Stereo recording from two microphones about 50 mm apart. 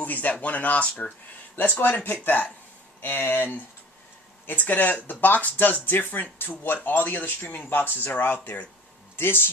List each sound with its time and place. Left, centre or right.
0.0 s speech: left